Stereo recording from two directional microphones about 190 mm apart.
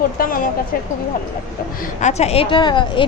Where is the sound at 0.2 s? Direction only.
50° left (ahead or behind).